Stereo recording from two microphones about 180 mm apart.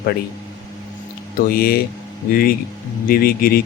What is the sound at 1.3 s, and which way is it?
Speech, 55° left (ahead or behind).